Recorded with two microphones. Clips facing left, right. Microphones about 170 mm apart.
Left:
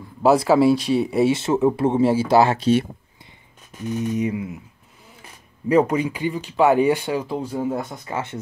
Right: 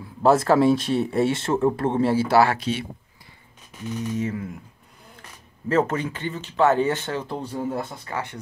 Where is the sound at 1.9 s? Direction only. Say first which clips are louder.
Left 3 dB; 15° left (ahead or behind).